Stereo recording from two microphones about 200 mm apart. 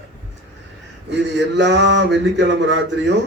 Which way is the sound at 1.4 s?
60° right (ahead or behind).